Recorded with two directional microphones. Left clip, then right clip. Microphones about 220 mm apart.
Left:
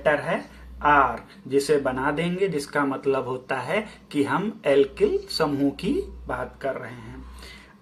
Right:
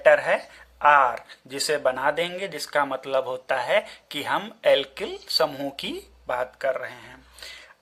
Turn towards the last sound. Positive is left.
turn(degrees=-45)  # may be behind; listen again after turning